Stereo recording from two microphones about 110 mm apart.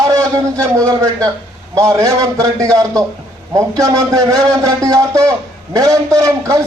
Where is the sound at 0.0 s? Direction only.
30° right (ahead or behind).